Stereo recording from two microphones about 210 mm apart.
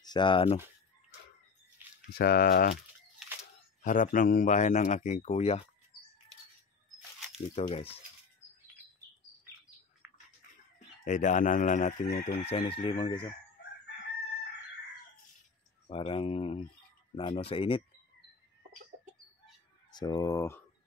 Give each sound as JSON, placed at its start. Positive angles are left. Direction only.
{"t": 0.0, "sound": "speech", "side_deg": 20}
{"t": 2.1, "sound": "speech", "side_deg": 45}
{"t": 3.8, "sound": "a man's voice", "side_deg": 40}
{"t": 7.3, "sound": "chicken", "side_deg": 30}
{"t": 11.1, "sound": "a man's voice", "side_deg": 35}
{"t": 12.2, "sound": "chicken", "side_deg": 35}
{"t": 15.9, "sound": "chicken", "side_deg": 25}
{"t": 19.9, "sound": "speech", "side_deg": 20}